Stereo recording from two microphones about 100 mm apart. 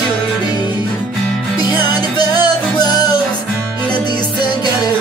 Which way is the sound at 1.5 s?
45° left (ahead or behind).